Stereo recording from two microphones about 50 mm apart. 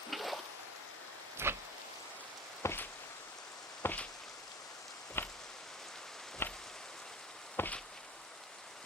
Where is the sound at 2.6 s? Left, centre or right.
Left.